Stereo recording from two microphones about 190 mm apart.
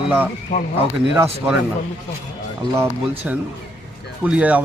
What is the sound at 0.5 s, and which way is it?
Speech, 50° left (ahead or behind).